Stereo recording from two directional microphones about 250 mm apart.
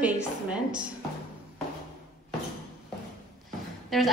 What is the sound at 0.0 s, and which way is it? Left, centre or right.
Speech, centre.